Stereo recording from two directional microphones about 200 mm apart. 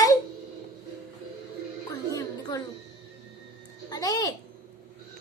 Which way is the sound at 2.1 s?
20° left (ahead or behind).